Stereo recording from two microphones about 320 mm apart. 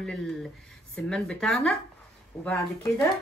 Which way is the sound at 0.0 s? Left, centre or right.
Centre.